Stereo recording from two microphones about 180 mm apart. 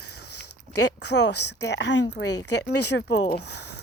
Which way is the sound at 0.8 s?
70° left (ahead or behind).